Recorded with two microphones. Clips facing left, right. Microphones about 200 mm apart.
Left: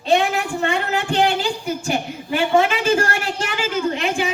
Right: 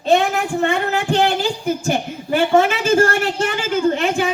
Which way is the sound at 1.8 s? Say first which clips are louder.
Right 2 dB; 45° right (ahead or behind).